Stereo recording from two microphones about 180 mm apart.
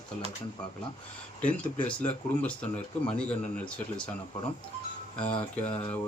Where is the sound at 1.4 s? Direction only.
10° left (ahead or behind).